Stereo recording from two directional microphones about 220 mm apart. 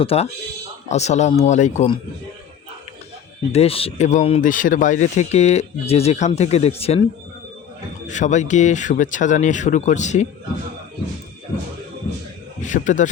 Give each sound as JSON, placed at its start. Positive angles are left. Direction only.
{"t": 0.0, "sound": "speech", "side_deg": 25}
{"t": 3.5, "sound": "speech", "side_deg": 25}
{"t": 8.0, "sound": "speech", "side_deg": 35}
{"t": 12.6, "sound": "speech", "side_deg": 35}